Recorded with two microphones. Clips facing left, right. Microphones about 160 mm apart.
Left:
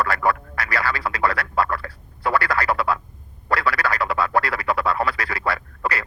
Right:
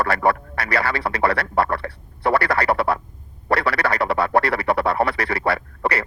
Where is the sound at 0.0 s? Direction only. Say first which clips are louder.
Right 2 dB; 30° right (ahead or behind).